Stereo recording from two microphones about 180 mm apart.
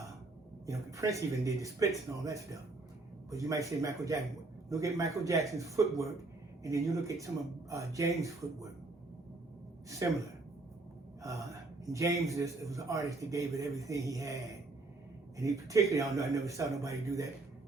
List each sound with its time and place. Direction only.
0.7 s a man's voice: 15° right (ahead or behind)
10.0 s a man's voice: 15° right (ahead or behind)
11.9 s a man's voice: 15° right (ahead or behind)